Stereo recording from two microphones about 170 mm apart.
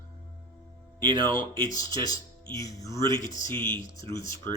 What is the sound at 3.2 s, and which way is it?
Speech, 45° left (ahead or behind).